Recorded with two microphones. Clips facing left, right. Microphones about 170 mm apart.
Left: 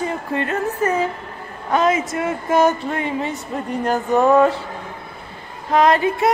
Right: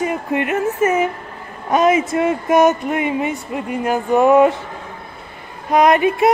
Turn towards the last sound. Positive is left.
turn(degrees=-20)  # may be behind; listen again after turning